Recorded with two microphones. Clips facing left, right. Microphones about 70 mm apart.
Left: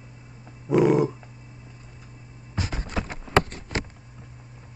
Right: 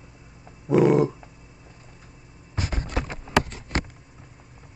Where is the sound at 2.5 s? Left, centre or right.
Right.